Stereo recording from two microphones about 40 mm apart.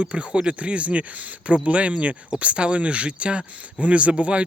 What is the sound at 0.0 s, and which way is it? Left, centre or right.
Speech, right.